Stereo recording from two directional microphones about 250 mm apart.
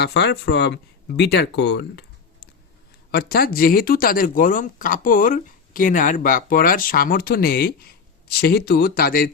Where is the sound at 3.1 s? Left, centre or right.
Left.